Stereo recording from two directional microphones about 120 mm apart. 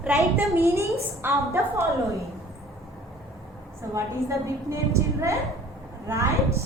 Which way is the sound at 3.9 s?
25° right (ahead or behind).